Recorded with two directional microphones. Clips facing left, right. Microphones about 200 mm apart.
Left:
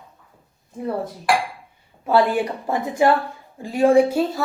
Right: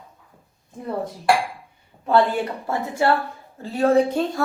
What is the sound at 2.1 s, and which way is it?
Speech, 10° left (ahead or behind).